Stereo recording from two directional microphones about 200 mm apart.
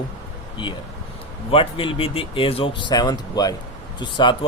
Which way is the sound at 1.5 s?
25° left (ahead or behind).